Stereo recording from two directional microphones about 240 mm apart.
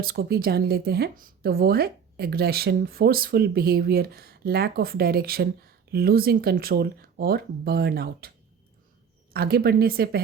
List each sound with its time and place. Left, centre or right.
0.0 s speech: right
9.3 s speech: right